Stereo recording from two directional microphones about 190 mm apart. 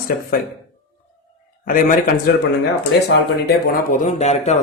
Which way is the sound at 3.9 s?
40° left (ahead or behind).